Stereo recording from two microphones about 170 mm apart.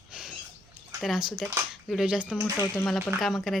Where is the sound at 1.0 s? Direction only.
5° right (ahead or behind).